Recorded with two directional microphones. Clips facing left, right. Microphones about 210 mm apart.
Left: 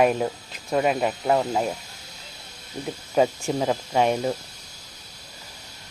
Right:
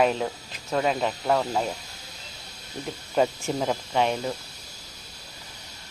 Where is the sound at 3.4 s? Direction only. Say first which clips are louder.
Left 3 dB; 10° left (ahead or behind).